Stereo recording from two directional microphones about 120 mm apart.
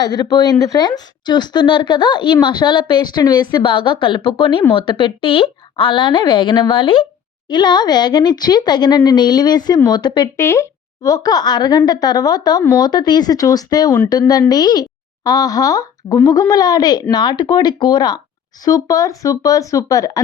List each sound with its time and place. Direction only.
0.0 s a woman's voice: 35° left (ahead or behind)
10.3 s a woman's voice: 25° left (ahead or behind)